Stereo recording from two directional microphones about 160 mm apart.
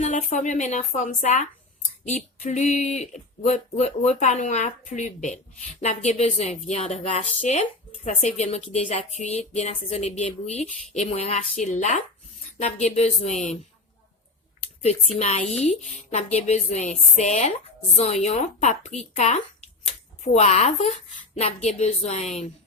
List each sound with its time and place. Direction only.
0.0 s speech: 45° left (ahead or behind)
8.7 s a sound: 40° left (ahead or behind)
9.1 s speech: 45° left (ahead or behind)
14.8 s speech: 40° left (ahead or behind)